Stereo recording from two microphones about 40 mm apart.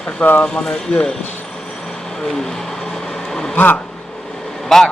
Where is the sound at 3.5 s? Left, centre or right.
Left.